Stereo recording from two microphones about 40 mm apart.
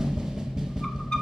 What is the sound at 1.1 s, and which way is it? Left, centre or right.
Sonar, centre.